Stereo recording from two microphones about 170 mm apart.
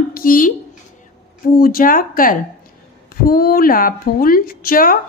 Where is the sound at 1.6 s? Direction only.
60° left (ahead or behind).